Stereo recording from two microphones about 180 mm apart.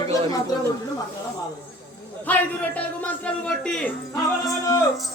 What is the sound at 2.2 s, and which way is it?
A man's voice, 10° left (ahead or behind).